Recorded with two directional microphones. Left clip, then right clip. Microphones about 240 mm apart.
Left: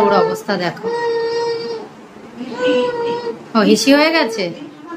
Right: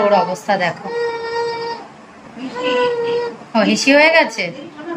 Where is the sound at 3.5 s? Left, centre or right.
Centre.